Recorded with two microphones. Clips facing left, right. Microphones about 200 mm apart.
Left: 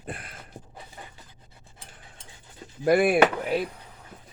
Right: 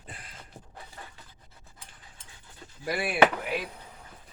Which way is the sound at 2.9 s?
45° left (ahead or behind).